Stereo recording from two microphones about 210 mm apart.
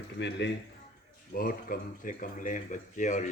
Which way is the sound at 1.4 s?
45° left (ahead or behind).